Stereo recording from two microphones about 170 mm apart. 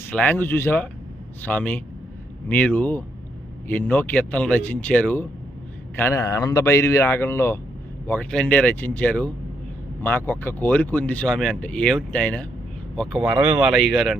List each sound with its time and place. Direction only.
0.1 s speech: 10° left (ahead or behind)